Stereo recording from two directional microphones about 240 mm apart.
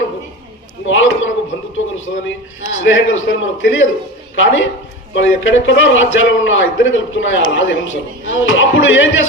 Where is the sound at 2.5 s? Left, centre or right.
Left.